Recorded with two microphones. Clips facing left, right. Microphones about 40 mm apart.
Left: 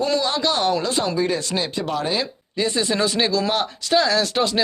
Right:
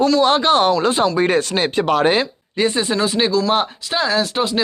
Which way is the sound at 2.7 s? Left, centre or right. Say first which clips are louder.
Even; right.